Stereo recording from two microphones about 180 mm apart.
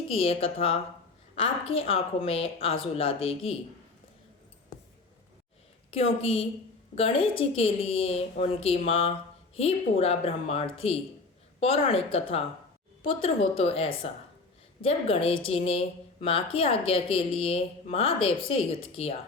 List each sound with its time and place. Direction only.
0.1 s speech: 30° left (ahead or behind)
5.9 s a woman's voice: 30° left (ahead or behind)